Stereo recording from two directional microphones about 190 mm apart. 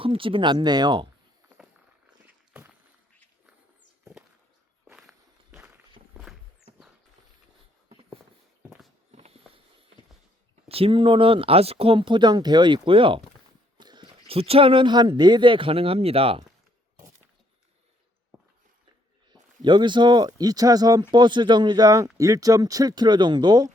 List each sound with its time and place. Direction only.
0.0 s speech: 30° right (ahead or behind)
2.5 s walk: 5° right (ahead or behind)
4.9 s walk: 5° right (ahead or behind)
7.9 s a sound: 30° right (ahead or behind)
10.7 s speech: 30° right (ahead or behind)
19.3 s speech: 25° right (ahead or behind)